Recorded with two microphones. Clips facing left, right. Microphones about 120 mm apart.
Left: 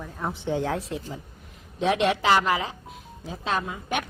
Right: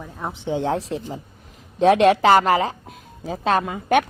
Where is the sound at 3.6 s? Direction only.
60° right (ahead or behind).